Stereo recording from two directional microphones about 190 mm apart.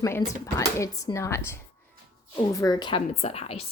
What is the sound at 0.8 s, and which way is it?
Speech, 15° left (ahead or behind).